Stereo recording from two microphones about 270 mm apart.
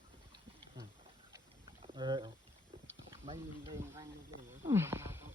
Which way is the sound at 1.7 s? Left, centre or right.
Centre.